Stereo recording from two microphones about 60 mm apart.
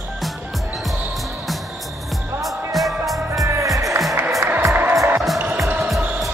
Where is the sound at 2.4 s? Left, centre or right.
Centre.